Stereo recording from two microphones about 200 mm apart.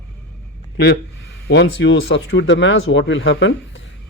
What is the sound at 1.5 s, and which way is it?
Speech, 60° left (ahead or behind).